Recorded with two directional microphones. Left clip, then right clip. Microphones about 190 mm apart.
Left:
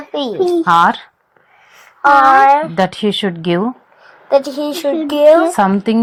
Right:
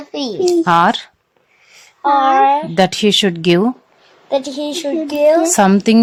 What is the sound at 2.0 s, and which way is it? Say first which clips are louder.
Speech: left 4 dB; 20° left (ahead or behind).